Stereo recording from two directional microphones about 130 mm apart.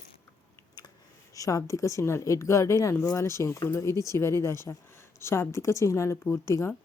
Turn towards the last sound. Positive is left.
turn(degrees=20)  # may be behind; listen again after turning